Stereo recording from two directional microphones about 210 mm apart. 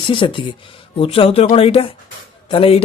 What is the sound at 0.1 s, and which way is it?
Speech, 25° left (ahead or behind).